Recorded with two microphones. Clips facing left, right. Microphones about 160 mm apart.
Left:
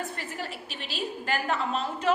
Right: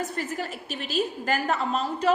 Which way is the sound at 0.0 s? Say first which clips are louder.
Right 5 dB; 45° right (ahead or behind).